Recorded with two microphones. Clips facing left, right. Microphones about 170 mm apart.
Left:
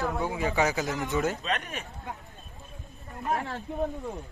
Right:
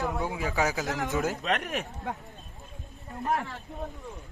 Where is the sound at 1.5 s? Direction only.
70° right (ahead or behind).